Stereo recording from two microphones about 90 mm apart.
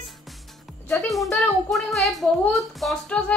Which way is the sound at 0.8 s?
Centre (ahead or behind).